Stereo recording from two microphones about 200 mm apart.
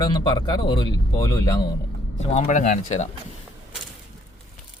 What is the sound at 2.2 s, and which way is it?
Speech, 35° left (ahead or behind).